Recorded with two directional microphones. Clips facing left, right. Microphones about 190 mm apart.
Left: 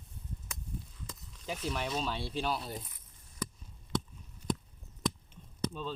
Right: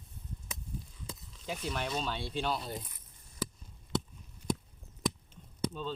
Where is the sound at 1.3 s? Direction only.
Centre (ahead or behind).